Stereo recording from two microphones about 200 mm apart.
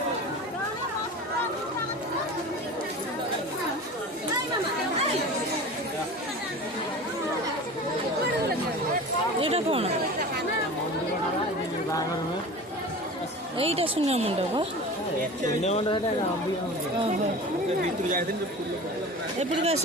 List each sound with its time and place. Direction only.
9.4 s chatter: 30° right (ahead or behind)
13.6 s speech: 30° right (ahead or behind)
15.6 s speech: 30° left (ahead or behind)
19.4 s speech: 35° right (ahead or behind)